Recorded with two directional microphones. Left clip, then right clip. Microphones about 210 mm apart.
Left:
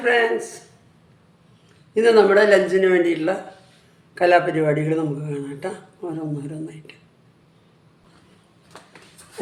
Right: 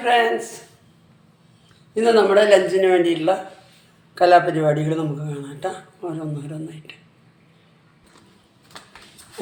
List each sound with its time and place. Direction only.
0.0 s a man's voice: 10° left (ahead or behind)
2.0 s a man's voice: 15° left (ahead or behind)